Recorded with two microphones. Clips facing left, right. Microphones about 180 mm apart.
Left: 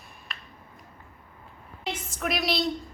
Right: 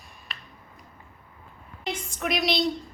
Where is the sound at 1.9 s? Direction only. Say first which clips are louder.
Right 2 dB; centre (ahead or behind).